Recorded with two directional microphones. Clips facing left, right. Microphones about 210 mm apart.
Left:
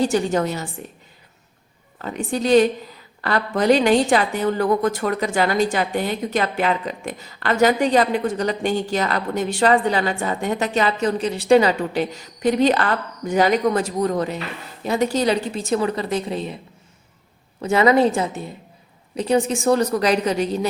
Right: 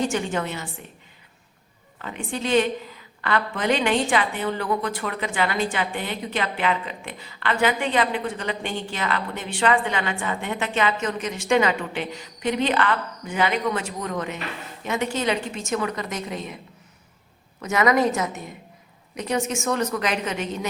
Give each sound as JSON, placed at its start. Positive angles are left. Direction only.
{"t": 0.0, "sound": "a woman's voice", "side_deg": 35}
{"t": 2.0, "sound": "a woman's voice", "side_deg": 40}
{"t": 17.6, "sound": "a woman's voice", "side_deg": 30}